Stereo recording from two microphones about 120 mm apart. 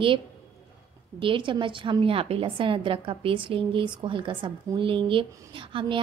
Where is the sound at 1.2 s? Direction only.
45° right (ahead or behind).